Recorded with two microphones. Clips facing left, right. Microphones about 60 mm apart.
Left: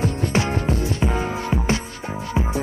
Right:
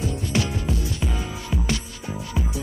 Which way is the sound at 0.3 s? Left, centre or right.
Left.